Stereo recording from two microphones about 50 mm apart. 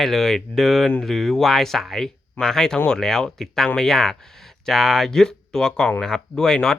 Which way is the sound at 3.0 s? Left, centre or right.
Centre.